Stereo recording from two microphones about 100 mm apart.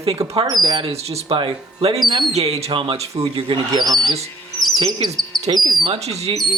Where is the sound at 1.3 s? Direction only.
65° right (ahead or behind).